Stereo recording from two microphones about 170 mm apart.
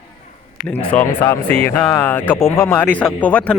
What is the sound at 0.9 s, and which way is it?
Speech, 10° left (ahead or behind).